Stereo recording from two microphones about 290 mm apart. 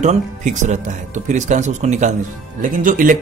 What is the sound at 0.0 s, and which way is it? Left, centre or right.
Speech, right.